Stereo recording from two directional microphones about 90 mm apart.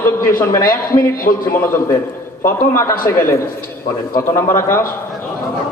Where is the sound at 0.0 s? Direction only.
20° left (ahead or behind).